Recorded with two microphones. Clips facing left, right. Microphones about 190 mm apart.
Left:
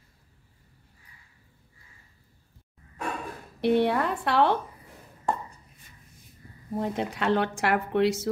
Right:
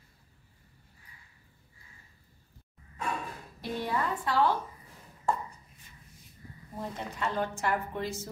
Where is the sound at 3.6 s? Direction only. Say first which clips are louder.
Left 10 dB; 70° left (ahead or behind).